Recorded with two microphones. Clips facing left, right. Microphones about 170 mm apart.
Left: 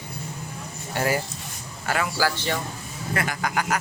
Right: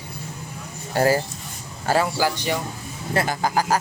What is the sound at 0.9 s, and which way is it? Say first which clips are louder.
Speech: right 6 dB; 35° right (ahead or behind).